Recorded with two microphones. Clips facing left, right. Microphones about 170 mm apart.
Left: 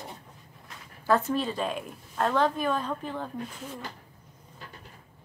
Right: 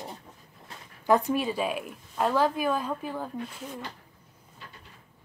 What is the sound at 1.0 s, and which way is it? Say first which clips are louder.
Speech: right 2 dB; 15° right (ahead or behind).